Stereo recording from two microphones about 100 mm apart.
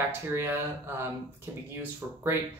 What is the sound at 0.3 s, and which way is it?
Speech, 25° right (ahead or behind).